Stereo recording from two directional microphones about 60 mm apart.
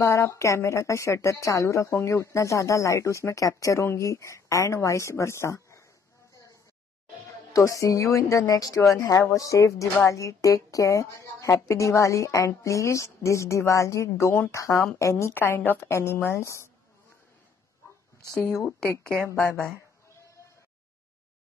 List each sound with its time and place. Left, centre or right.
0.0 s a woman's voice: left
7.5 s a woman's voice: left
15.3 s a woman's voice: left
16.3 s speech: left
18.3 s a woman's voice: left
19.4 s speech: left